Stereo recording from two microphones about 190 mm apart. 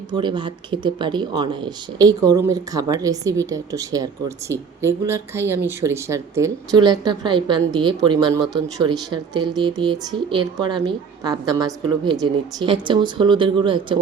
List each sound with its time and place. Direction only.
0.1 s speech: 25° right (ahead or behind)